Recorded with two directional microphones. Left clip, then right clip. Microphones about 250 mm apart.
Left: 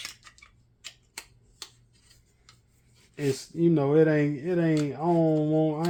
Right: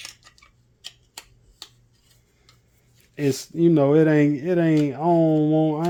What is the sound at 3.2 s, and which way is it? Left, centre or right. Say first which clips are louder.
Speech: right 5 dB; right.